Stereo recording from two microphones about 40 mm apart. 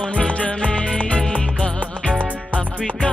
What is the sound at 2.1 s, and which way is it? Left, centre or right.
Music, right.